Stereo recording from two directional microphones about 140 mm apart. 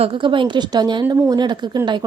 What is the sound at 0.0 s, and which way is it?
A woman's voice, 40° right (ahead or behind).